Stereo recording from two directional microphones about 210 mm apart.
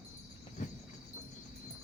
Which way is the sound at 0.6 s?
40° left (ahead or behind).